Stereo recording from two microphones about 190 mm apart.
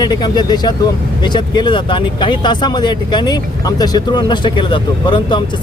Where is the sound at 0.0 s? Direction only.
20° left (ahead or behind).